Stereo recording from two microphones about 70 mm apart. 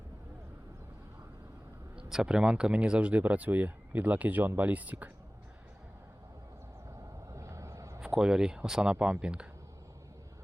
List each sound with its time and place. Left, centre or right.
2.0 s speech: centre
7.3 s vehicle: right
8.0 s speech: centre